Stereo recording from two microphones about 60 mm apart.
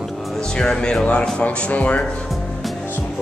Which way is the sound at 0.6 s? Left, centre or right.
Centre.